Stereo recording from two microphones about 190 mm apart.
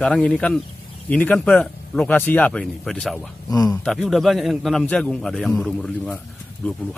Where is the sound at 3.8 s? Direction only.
Centre (ahead or behind).